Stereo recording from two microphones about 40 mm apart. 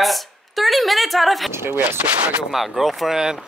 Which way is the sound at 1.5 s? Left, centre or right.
Right.